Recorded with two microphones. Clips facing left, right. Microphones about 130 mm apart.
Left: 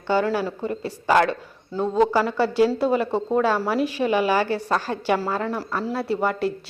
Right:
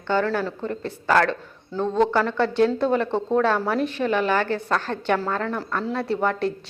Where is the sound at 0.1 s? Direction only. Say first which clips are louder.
Left 1 dB; 10° left (ahead or behind).